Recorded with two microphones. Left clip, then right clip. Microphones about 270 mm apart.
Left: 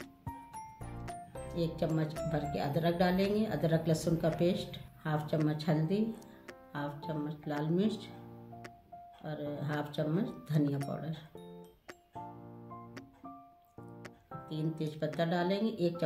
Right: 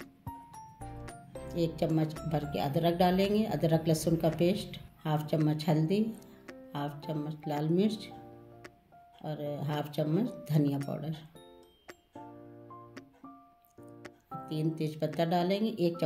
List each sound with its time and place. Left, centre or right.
1.5 s speech: centre
9.2 s speech: centre
14.5 s speech: centre